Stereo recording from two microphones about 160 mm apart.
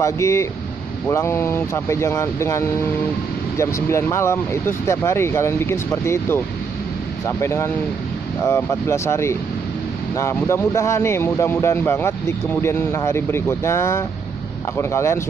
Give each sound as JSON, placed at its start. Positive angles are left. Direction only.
{"t": 0.0, "sound": "speech", "side_deg": 15}